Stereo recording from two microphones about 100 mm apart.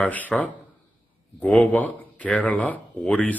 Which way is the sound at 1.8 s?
15° left (ahead or behind).